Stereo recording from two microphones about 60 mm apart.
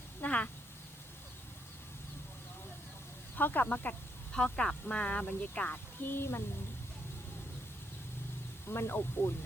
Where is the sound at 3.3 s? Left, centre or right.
Left.